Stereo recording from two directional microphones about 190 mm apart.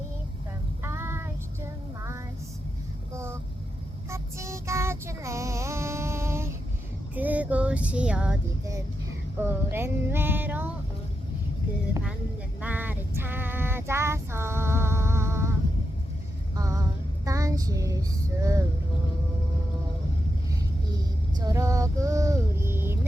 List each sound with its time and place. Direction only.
0.8 s child singing: 15° right (ahead or behind)
2.0 s music: 15° right (ahead or behind)
4.1 s child singing: 15° right (ahead or behind)
7.2 s music: 10° right (ahead or behind)
9.4 s a sound: 10° right (ahead or behind)
12.6 s female singing: 10° right (ahead or behind)
16.6 s vehicle: 15° right (ahead or behind)
17.2 s child singing: 15° right (ahead or behind)
21.4 s a sound: 15° right (ahead or behind)